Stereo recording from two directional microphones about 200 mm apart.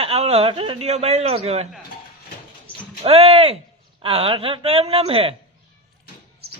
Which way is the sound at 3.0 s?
30° right (ahead or behind).